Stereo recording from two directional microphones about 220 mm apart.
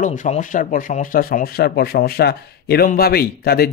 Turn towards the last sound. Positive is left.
turn(degrees=45)  # may be behind; listen again after turning